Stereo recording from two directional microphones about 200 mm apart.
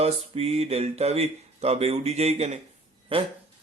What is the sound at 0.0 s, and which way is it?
Speech, 30° right (ahead or behind).